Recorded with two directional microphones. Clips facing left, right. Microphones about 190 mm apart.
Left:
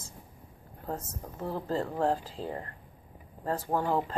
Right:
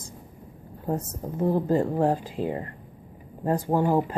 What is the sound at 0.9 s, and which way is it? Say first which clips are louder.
Speech: right 8 dB; 20° right (ahead or behind).